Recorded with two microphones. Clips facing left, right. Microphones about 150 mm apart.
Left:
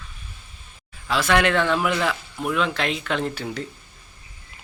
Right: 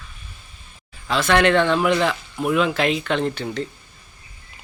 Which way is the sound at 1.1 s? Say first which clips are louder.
Right 3 dB; 5° left (ahead or behind).